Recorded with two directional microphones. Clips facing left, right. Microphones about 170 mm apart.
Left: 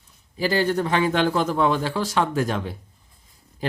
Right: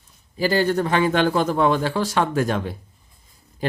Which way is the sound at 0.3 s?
40° right (ahead or behind).